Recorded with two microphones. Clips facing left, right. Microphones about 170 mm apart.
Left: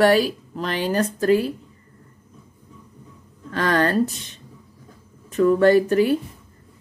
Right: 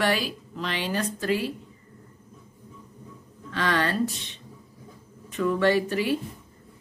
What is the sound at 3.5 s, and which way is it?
Speech, 45° left (ahead or behind).